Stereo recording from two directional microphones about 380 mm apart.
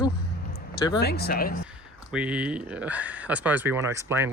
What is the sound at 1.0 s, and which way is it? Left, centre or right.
Speech, left.